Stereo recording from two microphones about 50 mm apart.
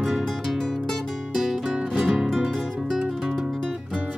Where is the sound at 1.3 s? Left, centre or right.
Centre.